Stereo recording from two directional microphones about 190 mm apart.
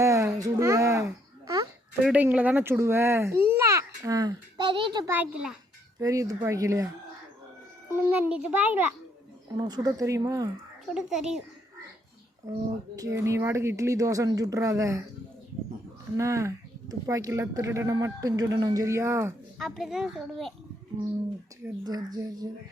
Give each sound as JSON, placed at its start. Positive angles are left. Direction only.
{"t": 0.0, "sound": "a sound", "side_deg": -15}
{"t": 0.4, "sound": "babbling", "side_deg": -15}
{"t": 2.0, "sound": "a child's voice", "side_deg": -5}
{"t": 5.1, "sound": "a child's voice", "side_deg": -5}
{"t": 6.0, "sound": "a child's voice", "side_deg": -20}
{"t": 7.9, "sound": "a child's voice", "side_deg": -10}
{"t": 9.6, "sound": "speech", "side_deg": -20}
{"t": 10.8, "sound": "a child's voice", "side_deg": -5}
{"t": 13.2, "sound": "a child's voice", "side_deg": -15}
{"t": 16.1, "sound": "a child's voice", "side_deg": -15}
{"t": 19.5, "sound": "a child's voice", "side_deg": 0}
{"t": 21.8, "sound": "speech", "side_deg": -20}